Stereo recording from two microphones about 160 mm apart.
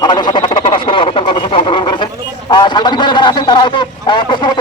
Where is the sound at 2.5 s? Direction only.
30° left (ahead or behind).